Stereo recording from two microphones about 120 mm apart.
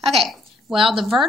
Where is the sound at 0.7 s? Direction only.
45° right (ahead or behind).